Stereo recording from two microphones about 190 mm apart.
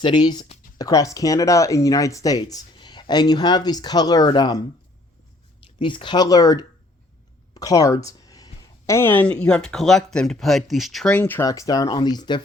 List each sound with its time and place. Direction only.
0.0 s speech: 25° left (ahead or behind)
7.5 s a sound: 20° left (ahead or behind)
8.9 s speech: 10° left (ahead or behind)